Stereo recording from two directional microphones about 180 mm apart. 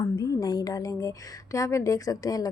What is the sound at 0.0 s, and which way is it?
A woman's voice, 20° left (ahead or behind).